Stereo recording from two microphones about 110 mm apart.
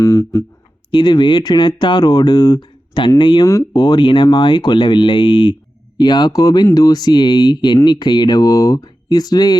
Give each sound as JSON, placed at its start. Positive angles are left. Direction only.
{"t": 0.0, "sound": "speech", "side_deg": 30}
{"t": 0.9, "sound": "speech", "side_deg": 45}
{"t": 3.4, "sound": "speech", "side_deg": 35}